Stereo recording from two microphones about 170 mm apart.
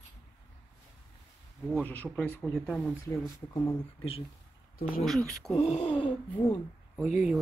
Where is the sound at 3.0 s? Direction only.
20° left (ahead or behind).